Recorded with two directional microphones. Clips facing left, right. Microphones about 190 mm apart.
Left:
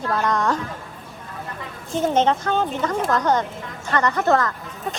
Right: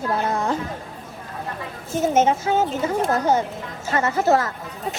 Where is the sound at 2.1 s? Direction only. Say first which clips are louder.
Right 2 dB; 5° right (ahead or behind).